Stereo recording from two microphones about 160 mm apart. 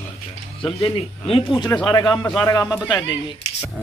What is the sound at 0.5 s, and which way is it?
Speech, 35° left (ahead or behind).